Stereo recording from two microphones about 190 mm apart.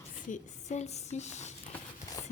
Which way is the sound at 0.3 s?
40° left (ahead or behind).